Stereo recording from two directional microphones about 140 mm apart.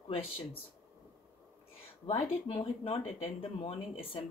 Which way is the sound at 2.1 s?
45° left (ahead or behind).